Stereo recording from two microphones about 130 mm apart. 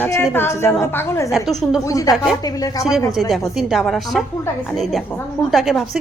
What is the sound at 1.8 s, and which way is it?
A woman's voice, 25° left (ahead or behind).